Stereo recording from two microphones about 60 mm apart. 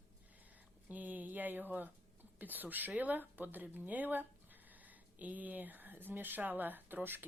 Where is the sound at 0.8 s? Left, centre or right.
Right.